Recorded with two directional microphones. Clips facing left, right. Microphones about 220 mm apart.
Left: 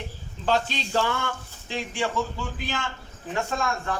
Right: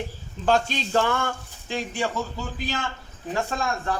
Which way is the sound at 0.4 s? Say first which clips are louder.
Right 3 dB; 50° right (ahead or behind).